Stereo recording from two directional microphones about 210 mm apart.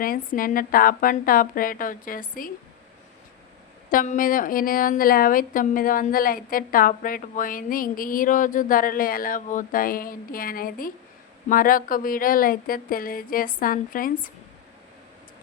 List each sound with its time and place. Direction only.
0.0 s a woman's voice: 40° left (ahead or behind)
3.8 s a woman's voice: 40° left (ahead or behind)